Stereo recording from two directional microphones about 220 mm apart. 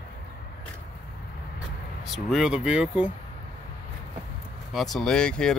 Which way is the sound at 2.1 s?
Centre (ahead or behind).